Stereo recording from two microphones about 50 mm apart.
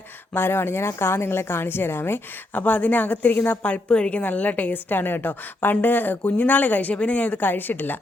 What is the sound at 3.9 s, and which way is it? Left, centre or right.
A woman's voice, left.